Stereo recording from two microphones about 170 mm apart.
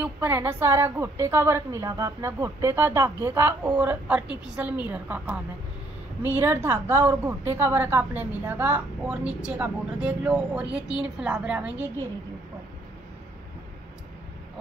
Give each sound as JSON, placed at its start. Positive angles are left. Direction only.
{"t": 0.0, "sound": "a woman's voice", "side_deg": -10}